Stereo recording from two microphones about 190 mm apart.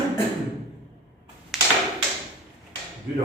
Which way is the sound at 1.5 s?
Centre (ahead or behind).